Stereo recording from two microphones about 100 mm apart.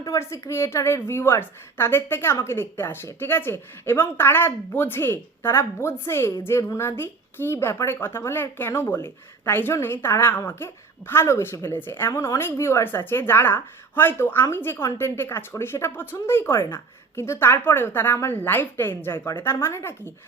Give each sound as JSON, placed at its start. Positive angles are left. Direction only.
{"t": 0.0, "sound": "a woman's voice", "side_deg": 30}